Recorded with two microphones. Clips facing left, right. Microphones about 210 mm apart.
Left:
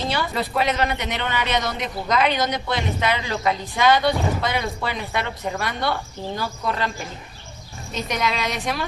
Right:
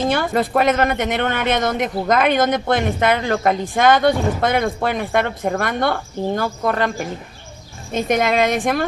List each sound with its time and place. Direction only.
0.0 s speech: 50° right (ahead or behind)